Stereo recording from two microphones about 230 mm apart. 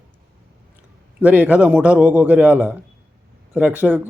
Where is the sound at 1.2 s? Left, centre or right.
Centre.